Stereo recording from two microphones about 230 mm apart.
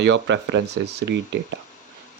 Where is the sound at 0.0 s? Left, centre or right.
Right.